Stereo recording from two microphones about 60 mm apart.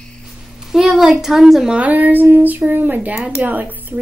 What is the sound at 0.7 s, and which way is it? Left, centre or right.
A woman's voice, centre.